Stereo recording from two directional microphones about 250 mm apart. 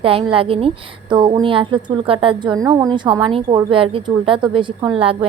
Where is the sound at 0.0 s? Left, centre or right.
Right.